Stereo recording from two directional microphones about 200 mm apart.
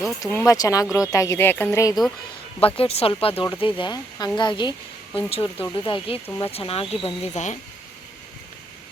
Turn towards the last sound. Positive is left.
turn(degrees=35)  # may be behind; listen again after turning